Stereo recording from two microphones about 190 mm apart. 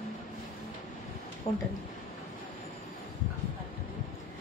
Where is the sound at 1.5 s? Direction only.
35° left (ahead or behind).